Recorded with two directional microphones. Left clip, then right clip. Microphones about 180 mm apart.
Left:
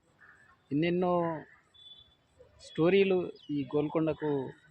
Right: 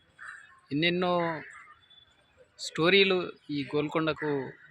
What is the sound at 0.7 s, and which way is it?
Speech, centre (ahead or behind).